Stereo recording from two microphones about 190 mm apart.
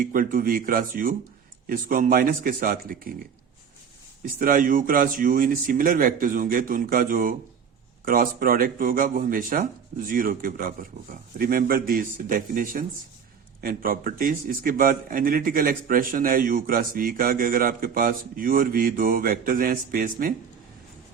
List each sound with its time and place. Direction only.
0.0 s a man's voice: 45° right (ahead or behind)
4.4 s a man's voice: 45° right (ahead or behind)